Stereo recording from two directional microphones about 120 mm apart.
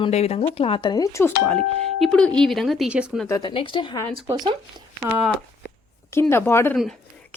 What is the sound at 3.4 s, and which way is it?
Speech, 45° left (ahead or behind).